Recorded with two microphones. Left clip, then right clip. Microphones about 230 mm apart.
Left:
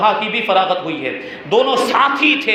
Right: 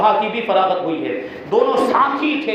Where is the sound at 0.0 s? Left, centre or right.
Left.